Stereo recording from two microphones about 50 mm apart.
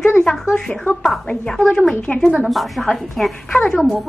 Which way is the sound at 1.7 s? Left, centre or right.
Centre.